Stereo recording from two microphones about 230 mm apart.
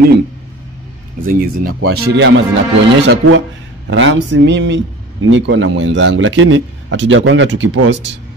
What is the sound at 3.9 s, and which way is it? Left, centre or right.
A man's voice, right.